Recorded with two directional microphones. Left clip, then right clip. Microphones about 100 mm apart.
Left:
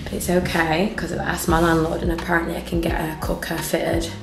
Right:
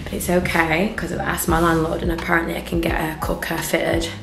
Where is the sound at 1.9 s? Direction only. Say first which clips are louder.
Right 1 dB; 5° right (ahead or behind).